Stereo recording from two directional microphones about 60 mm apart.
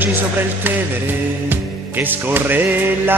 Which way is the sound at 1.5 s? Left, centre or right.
Right.